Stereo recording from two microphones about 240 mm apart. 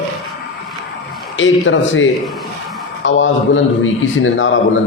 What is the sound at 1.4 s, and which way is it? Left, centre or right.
Speech, left.